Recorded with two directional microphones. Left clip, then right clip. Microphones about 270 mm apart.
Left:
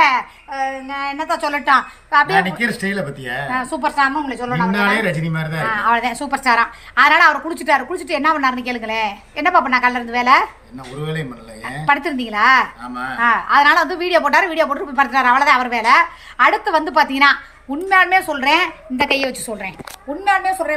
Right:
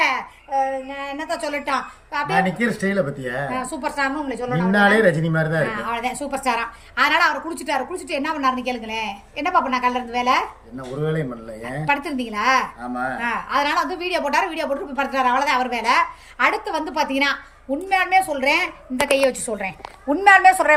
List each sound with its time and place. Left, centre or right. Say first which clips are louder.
0.0 s child singing: left 6 dB; centre
0.7 s a woman's voice: left 4 dB; centre
2.3 s speech: left 3 dB; centre
3.5 s a woman's voice: left 6 dB; centre
4.7 s speech: right 4 dB; centre
5.6 s a woman's voice: left 8 dB; centre
11.0 s a woman's voice: right 2 dB; centre